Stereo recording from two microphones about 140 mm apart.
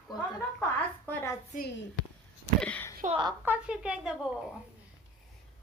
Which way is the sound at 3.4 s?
10° right (ahead or behind).